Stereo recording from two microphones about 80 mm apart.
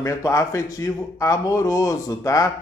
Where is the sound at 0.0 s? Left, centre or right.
Left.